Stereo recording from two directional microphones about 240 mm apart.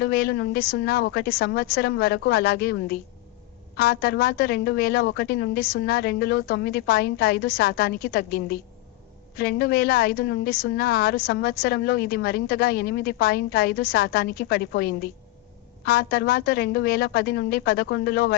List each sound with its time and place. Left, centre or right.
0.0 s a woman's voice: left